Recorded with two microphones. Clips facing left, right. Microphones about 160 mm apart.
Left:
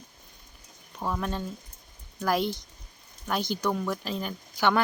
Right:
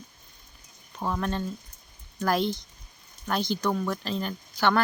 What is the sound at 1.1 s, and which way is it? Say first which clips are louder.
Speech: right 3 dB; 10° left (ahead or behind).